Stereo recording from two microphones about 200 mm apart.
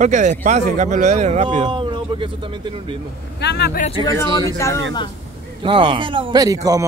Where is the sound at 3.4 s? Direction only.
55° left (ahead or behind).